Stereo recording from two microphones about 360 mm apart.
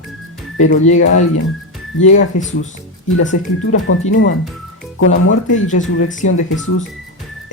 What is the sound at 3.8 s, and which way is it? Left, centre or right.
Speech, left.